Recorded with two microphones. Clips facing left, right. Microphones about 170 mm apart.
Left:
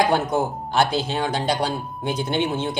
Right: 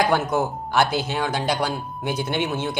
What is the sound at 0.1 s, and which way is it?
Speech, 20° left (ahead or behind).